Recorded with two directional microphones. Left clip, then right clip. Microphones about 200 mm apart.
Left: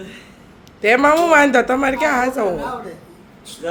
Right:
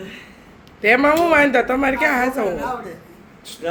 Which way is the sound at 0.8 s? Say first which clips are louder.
Left 1 dB; 10° left (ahead or behind).